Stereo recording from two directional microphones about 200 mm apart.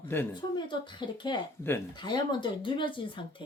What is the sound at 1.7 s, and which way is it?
Speech, 10° left (ahead or behind).